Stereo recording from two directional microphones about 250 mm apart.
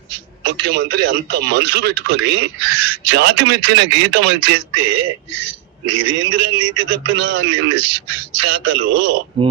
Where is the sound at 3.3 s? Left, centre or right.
Right.